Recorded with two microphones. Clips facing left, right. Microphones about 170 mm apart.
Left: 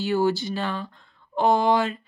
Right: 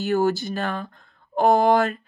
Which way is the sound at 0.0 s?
45° right (ahead or behind).